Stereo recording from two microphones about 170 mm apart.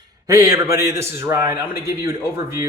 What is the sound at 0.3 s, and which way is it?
Speech, 20° right (ahead or behind).